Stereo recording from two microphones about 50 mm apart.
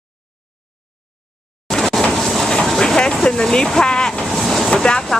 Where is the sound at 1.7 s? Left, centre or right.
Centre.